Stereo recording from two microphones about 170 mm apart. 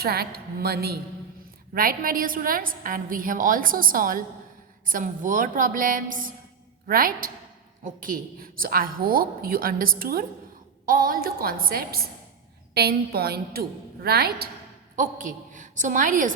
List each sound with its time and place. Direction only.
0.0 s a woman's voice: 65° right (ahead or behind)
14.9 s a woman's voice: 50° right (ahead or behind)